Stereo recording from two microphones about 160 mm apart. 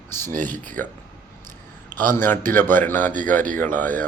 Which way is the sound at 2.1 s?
15° left (ahead or behind).